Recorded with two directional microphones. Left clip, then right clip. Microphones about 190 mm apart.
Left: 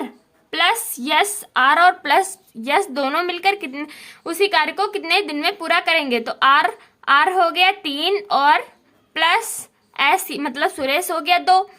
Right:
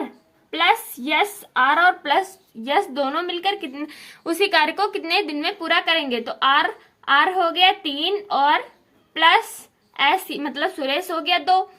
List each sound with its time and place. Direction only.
0.5 s a woman's voice: 30° left (ahead or behind)